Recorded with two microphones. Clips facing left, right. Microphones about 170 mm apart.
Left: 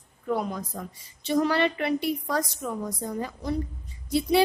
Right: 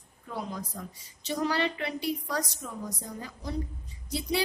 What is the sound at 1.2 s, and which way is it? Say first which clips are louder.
A woman's voice: left 6 dB; 60° left (ahead or behind).